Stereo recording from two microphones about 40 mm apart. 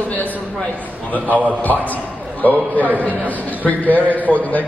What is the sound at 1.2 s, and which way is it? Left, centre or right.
Speech, right.